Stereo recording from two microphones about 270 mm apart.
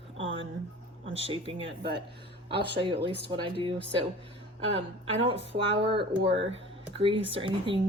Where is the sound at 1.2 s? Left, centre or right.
Right.